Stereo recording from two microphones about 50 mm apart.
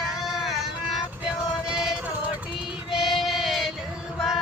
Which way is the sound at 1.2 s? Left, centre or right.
Centre.